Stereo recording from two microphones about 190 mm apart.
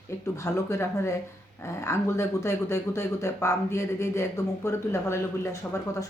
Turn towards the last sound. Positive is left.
turn(degrees=15)  # may be behind; listen again after turning